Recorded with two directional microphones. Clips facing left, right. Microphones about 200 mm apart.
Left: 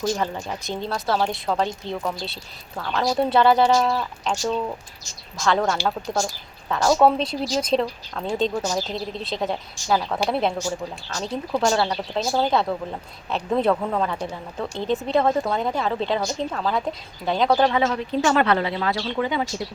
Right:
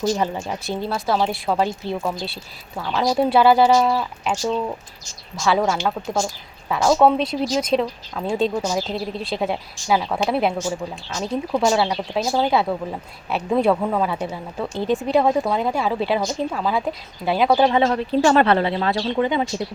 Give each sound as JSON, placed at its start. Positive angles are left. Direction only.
{"t": 0.4, "sound": "a woman's voice", "side_deg": -5}
{"t": 17.6, "sound": "speech", "side_deg": -25}